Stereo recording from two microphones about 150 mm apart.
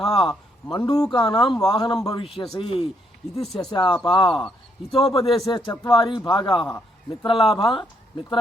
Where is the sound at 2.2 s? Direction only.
40° left (ahead or behind).